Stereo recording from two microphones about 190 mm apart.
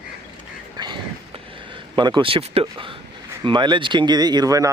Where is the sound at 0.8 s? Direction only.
25° right (ahead or behind).